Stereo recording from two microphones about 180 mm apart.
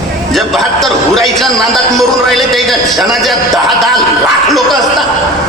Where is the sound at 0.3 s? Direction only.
Centre (ahead or behind).